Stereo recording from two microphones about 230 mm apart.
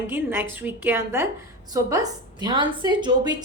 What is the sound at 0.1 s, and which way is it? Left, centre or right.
A woman's voice, centre.